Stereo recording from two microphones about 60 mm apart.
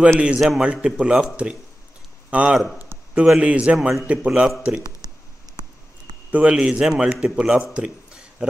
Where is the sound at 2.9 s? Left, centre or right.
Right.